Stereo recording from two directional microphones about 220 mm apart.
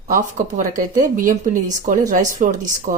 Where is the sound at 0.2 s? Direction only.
35° right (ahead or behind).